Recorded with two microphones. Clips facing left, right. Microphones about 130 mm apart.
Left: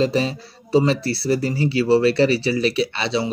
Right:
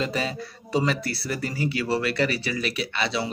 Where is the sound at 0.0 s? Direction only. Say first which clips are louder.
Left 7 dB; 30° left (ahead or behind).